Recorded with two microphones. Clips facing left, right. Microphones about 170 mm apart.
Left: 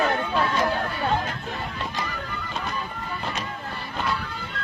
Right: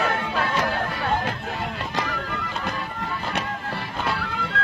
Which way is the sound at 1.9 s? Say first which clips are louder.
Right 4 dB; 80° right.